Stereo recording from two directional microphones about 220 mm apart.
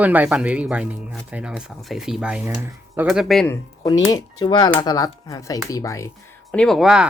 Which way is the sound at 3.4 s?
15° left (ahead or behind).